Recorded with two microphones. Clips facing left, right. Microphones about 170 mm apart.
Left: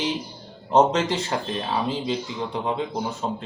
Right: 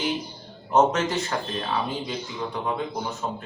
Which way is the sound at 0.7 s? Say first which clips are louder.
Left 2 dB; 30° left (ahead or behind).